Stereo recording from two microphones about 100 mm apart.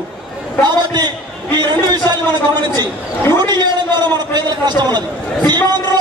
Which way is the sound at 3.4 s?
45° right (ahead or behind).